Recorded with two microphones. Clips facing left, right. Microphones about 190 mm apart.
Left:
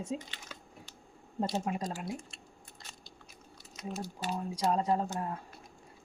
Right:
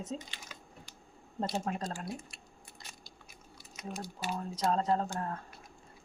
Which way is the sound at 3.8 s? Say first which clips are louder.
Left 2 dB; 10° right (ahead or behind).